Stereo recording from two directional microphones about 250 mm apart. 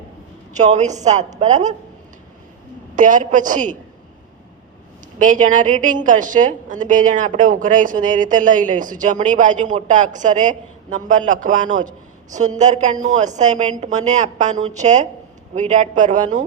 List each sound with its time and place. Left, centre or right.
0.5 s a woman's voice: right
2.9 s a woman's voice: right
5.2 s a woman's voice: right